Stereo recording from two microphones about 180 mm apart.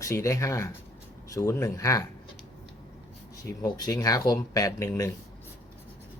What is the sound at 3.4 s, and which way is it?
Speech, 20° left (ahead or behind).